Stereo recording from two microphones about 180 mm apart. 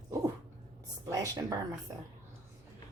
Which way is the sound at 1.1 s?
20° right (ahead or behind).